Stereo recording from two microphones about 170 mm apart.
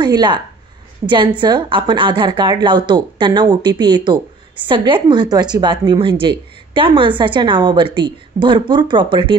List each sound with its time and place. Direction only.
0.0 s a woman's voice: 25° right (ahead or behind)